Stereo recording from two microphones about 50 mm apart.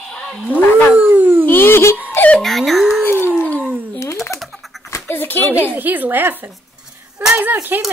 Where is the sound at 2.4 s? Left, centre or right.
Centre.